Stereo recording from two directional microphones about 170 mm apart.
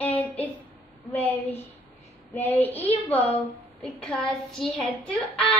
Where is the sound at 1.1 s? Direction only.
10° left (ahead or behind).